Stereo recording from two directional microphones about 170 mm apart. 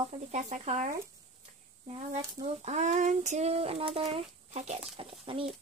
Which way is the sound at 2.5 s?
45° right (ahead or behind).